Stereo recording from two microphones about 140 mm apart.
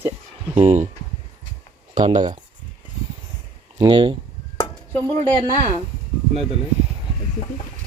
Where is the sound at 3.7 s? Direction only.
30° right (ahead or behind).